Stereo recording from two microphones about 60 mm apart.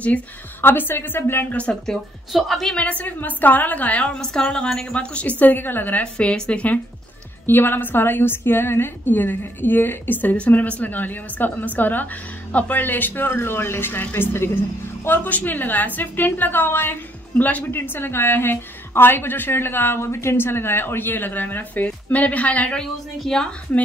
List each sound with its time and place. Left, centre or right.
0.6 s a woman's voice: left
1.9 s a woman's voice: centre
2.7 s a woman's voice: left
5.4 s a woman's voice: left
6.1 s a woman's voice: centre
7.4 s a woman's voice: left
22.8 s speech: centre